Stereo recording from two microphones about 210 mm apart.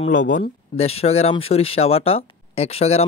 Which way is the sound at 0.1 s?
40° left (ahead or behind).